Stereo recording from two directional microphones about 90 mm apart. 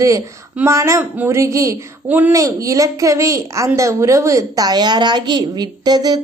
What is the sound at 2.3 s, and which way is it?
A woman's voice, 35° right (ahead or behind).